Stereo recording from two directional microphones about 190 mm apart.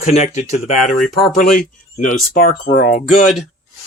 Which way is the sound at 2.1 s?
45° left (ahead or behind).